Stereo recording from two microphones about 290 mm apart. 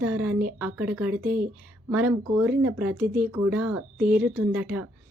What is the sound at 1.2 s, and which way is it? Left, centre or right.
Speech, right.